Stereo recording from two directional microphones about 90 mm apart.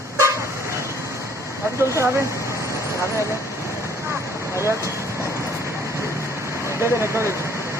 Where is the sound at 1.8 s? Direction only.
30° right (ahead or behind).